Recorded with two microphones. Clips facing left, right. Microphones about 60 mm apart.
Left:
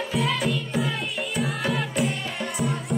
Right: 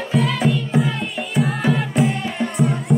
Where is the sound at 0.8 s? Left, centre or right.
Centre.